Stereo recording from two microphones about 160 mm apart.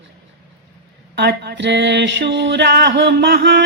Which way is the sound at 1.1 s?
90° right.